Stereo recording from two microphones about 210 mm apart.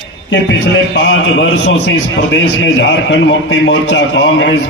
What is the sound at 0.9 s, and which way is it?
A man's voice, 60° left (ahead or behind).